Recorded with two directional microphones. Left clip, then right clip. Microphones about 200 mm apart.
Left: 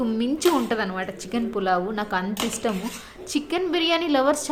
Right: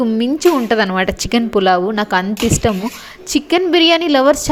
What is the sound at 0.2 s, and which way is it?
A woman's voice, 35° right (ahead or behind).